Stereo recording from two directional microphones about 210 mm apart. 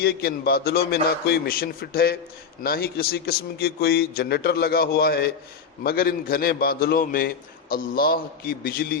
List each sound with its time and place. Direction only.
0.0 s a man's voice: 45° left (ahead or behind)